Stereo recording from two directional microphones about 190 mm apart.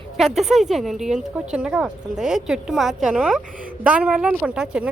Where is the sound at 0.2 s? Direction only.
Centre (ahead or behind).